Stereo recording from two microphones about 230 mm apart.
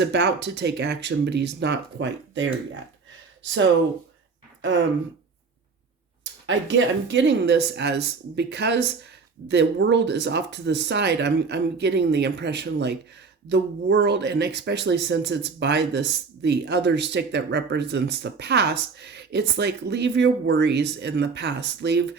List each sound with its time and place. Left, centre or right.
0.0 s speech: right
6.4 s speech: right